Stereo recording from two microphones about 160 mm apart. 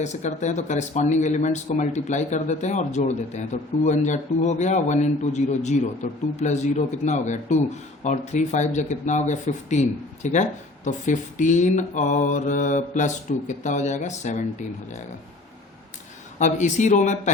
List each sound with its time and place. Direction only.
0.0 s speech: 45° left (ahead or behind)
16.4 s speech: 50° left (ahead or behind)